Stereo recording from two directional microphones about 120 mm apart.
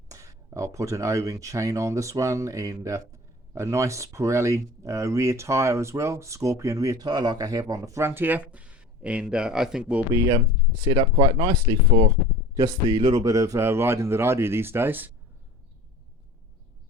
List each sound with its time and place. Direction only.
0.1 s speech: 25° right (ahead or behind); by 10.0 s 5° right (ahead or behind)
11.0 s speech: 35° right (ahead or behind); by 15.1 s 15° right (ahead or behind)